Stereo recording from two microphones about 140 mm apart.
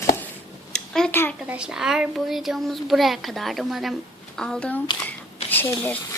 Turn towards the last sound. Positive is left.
turn(degrees=15)  # may be behind; listen again after turning